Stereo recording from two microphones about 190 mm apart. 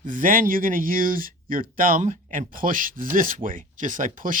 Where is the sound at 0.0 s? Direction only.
45° right (ahead or behind).